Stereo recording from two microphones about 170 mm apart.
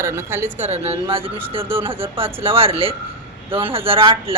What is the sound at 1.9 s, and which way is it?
Speech, 30° right (ahead or behind).